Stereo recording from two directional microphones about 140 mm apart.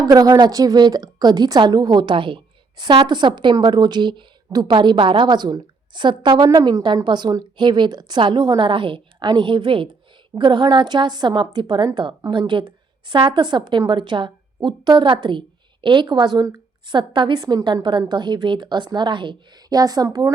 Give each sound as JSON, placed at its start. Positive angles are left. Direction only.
{"t": 0.0, "sound": "a woman's voice", "side_deg": -25}